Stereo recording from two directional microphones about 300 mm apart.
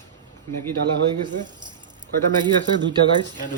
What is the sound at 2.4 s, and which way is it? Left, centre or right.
Speech, centre.